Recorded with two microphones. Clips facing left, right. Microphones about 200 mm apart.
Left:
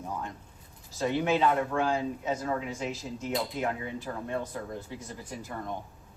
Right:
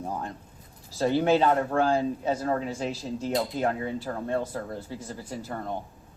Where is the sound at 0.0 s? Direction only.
35° right (ahead or behind).